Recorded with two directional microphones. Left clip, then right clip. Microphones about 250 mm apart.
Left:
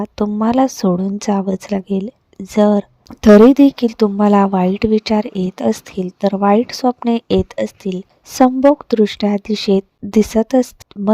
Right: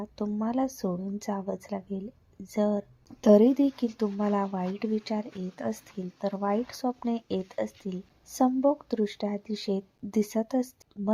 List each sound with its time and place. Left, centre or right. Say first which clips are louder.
0.0 s a woman's voice: left 15 dB; left